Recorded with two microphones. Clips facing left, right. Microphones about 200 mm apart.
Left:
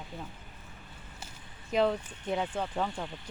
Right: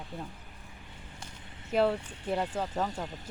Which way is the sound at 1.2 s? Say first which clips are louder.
Even; 5° left (ahead or behind).